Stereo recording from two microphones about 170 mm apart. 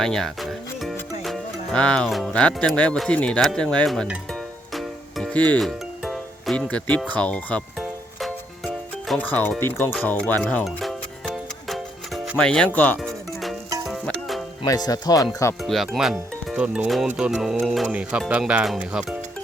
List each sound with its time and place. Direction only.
0.0 s music: 5° left (ahead or behind)
1.2 s speech: 5° left (ahead or behind)
4.7 s music: centre (ahead or behind)
7.1 s speech: 10° left (ahead or behind)
7.8 s music: centre (ahead or behind)
14.6 s speech: 20° left (ahead or behind)
15.6 s speech: centre (ahead or behind)